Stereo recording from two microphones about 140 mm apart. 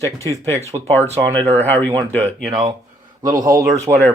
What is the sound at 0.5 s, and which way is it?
Speech, 50° right (ahead or behind).